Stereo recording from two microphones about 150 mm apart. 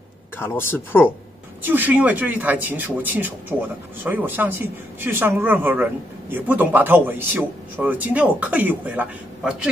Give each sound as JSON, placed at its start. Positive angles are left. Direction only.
{"t": 0.4, "sound": "speech", "side_deg": 15}
{"t": 1.6, "sound": "speech", "side_deg": -10}